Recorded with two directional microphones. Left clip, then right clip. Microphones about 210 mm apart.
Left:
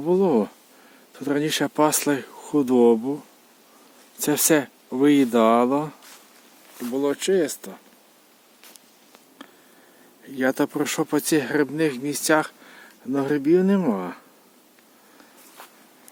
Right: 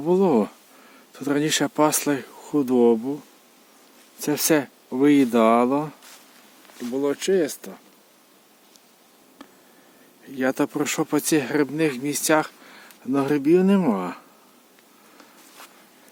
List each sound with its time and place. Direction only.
0.0 s speech: 5° right (ahead or behind)
4.2 s speech: 5° left (ahead or behind)
6.7 s speech: 15° left (ahead or behind)
7.0 s speech: 5° left (ahead or behind)
9.4 s a sound: centre (ahead or behind)
10.2 s speech: centre (ahead or behind)